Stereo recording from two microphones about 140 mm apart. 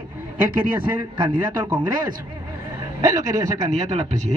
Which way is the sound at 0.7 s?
35° right (ahead or behind).